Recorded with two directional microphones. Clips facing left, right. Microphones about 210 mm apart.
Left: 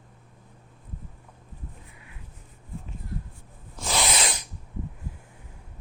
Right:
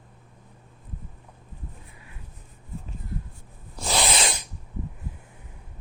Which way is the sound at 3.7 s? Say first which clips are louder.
Right 2 dB; 30° right (ahead or behind).